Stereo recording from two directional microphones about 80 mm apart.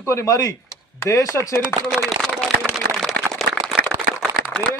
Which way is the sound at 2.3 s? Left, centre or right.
Centre.